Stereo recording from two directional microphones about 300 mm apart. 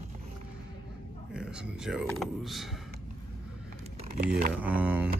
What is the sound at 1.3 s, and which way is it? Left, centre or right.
Speech, centre.